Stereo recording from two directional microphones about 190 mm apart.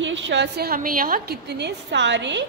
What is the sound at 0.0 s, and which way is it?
A woman's voice, 75° right (ahead or behind).